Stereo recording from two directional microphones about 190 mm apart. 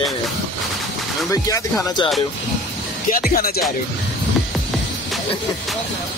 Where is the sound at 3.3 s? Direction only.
50° left (ahead or behind).